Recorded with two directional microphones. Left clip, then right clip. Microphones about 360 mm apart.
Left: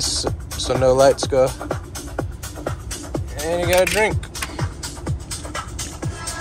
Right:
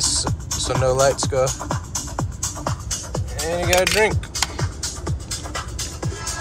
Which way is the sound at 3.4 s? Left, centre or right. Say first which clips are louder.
Left 1 dB; centre.